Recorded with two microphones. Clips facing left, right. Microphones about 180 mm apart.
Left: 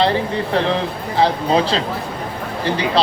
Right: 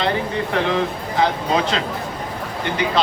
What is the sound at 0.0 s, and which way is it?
Speech, 30° left (ahead or behind).